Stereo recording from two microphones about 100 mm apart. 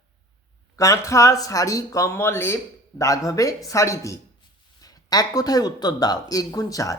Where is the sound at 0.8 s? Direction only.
30° left (ahead or behind).